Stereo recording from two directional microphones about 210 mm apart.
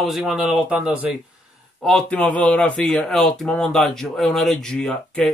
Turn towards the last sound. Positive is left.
turn(degrees=5)  # may be behind; listen again after turning